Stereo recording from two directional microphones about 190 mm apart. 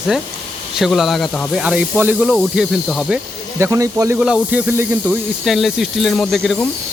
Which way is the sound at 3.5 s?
15° right (ahead or behind).